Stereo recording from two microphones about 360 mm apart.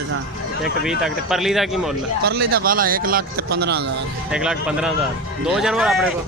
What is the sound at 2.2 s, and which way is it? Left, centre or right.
Speech, right.